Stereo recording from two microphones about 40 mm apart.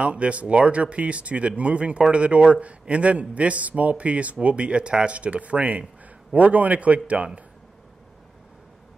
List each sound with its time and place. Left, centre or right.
0.0 s a man's voice: right